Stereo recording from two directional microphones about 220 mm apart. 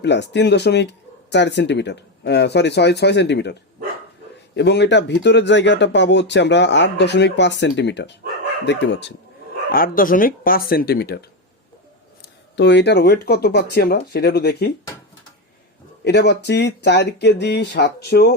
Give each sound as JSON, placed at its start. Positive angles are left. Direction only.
{"t": 0.0, "sound": "speech", "side_deg": 50}
{"t": 9.7, "sound": "speech", "side_deg": 40}
{"t": 12.2, "sound": "speech", "side_deg": 50}
{"t": 16.0, "sound": "speech", "side_deg": 50}